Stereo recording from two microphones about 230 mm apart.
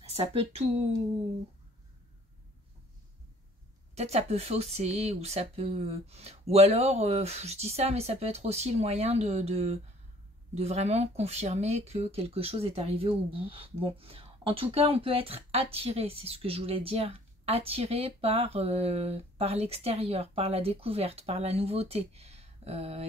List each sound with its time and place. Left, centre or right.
0.1 s speech: right
3.9 s speech: right